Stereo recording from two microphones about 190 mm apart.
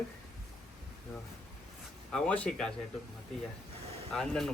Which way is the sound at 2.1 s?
5° left (ahead or behind).